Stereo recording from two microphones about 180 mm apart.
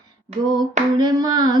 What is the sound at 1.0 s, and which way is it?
Hands, 20° right (ahead or behind).